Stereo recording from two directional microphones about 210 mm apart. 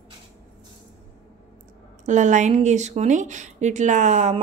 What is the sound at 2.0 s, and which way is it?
Speech, 35° right (ahead or behind).